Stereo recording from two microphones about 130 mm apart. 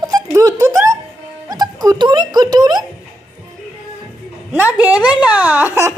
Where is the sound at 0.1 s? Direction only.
25° right (ahead or behind).